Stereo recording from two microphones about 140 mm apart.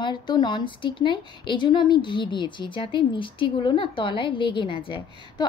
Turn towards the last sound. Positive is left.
turn(degrees=35)  # may be behind; listen again after turning